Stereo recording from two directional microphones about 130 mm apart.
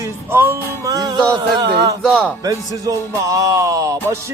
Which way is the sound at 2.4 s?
25° right (ahead or behind).